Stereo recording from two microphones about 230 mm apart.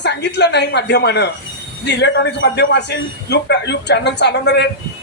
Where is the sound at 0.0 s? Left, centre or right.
Left.